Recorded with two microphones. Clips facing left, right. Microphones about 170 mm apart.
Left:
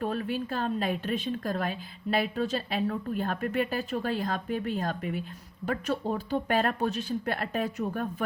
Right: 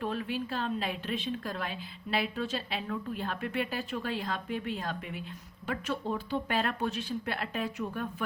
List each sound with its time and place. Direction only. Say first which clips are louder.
0.0 s a woman's voice: left 3 dB; 45° left (ahead or behind)